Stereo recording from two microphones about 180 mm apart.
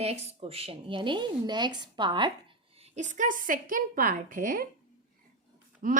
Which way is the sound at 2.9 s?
45° right (ahead or behind).